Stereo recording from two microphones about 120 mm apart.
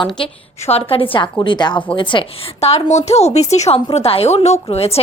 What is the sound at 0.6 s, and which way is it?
A woman's voice, 55° left (ahead or behind).